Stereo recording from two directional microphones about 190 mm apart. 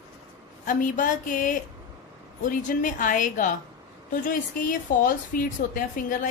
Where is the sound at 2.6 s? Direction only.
45° left (ahead or behind).